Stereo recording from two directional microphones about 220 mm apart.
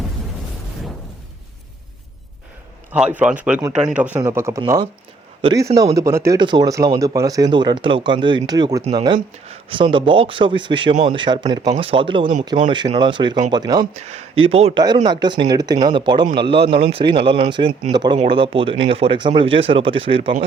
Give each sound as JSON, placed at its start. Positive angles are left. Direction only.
{"t": 2.9, "sound": "speech", "side_deg": -5}
{"t": 13.9, "sound": "speech", "side_deg": -30}